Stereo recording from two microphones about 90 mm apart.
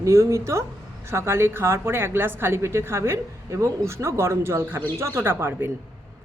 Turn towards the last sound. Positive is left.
turn(degrees=-25)  # may be behind; listen again after turning